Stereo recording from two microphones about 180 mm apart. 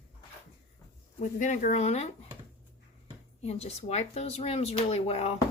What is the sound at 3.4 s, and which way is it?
Speech, 35° left (ahead or behind).